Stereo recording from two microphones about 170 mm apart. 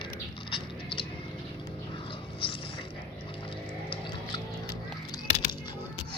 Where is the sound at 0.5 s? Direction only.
30° left (ahead or behind).